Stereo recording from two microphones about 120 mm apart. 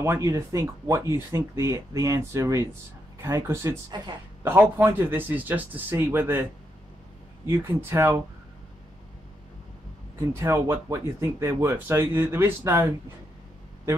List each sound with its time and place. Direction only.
0.0 s a man's voice: 25° right (ahead or behind)
7.4 s speech: 20° right (ahead or behind)
10.3 s speech: 20° right (ahead or behind)